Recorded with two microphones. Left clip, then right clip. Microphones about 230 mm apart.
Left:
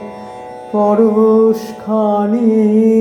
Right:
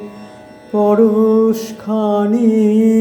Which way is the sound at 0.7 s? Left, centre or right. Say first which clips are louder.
Even; centre.